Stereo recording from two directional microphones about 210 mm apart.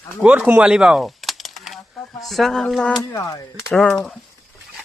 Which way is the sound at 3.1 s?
15° left (ahead or behind).